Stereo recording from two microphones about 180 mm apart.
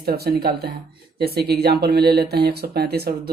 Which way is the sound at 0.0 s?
60° right (ahead or behind).